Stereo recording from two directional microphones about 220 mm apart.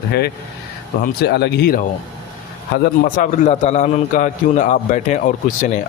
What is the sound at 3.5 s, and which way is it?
A man's voice, 30° left (ahead or behind).